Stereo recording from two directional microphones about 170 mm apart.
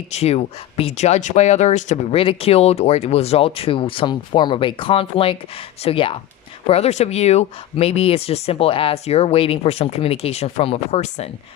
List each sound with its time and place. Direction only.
0.1 s speech: 40° left (ahead or behind)